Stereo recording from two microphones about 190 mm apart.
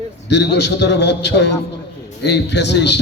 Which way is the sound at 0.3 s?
65° left (ahead or behind).